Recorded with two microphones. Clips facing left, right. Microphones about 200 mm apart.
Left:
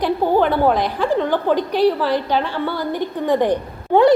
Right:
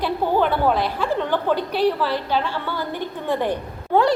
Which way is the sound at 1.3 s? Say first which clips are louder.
Left 3 dB; 15° left (ahead or behind).